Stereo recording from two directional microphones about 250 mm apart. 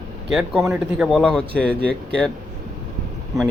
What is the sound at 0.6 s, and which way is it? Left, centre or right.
Speech, centre.